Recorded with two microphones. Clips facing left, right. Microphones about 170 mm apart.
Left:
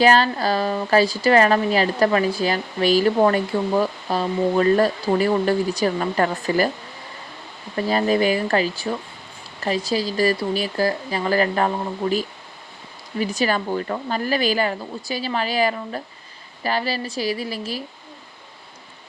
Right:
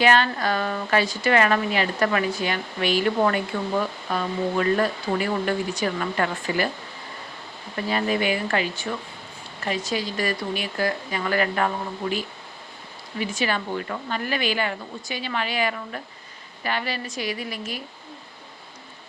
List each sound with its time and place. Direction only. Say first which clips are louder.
0.0 s speech: left 3 dB; 35° left (ahead or behind)
7.8 s speech: left 5 dB; 35° left (ahead or behind)